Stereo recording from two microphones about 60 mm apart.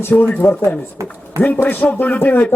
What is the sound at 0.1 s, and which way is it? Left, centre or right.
Rapping, left.